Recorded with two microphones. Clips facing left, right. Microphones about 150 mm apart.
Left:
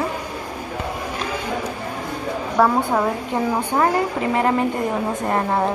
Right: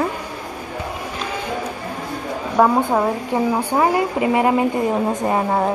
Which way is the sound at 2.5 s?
15° right (ahead or behind).